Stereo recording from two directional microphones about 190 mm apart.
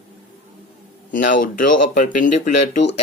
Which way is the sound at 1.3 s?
45° left (ahead or behind).